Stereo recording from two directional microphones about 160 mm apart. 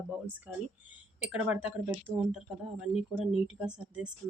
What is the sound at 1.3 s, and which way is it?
Speech, 5° right (ahead or behind).